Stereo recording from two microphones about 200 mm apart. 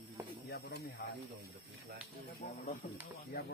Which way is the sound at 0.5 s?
55° left (ahead or behind).